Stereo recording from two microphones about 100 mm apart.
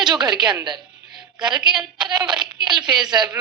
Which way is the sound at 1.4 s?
5° right (ahead or behind).